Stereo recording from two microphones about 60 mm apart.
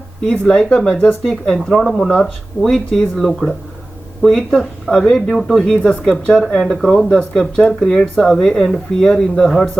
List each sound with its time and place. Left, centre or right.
0.3 s speech: centre
2.6 s speech: centre
5.3 s speech: centre
5.6 s speech: centre